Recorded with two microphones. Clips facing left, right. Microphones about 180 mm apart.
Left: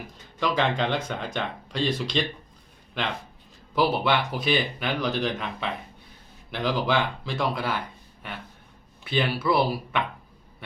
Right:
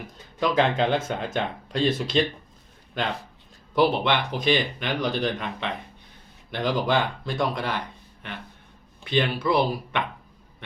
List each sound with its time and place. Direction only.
0.3 s speech: centre (ahead or behind)
3.8 s speech: 5° left (ahead or behind)
9.0 s speech: 5° left (ahead or behind)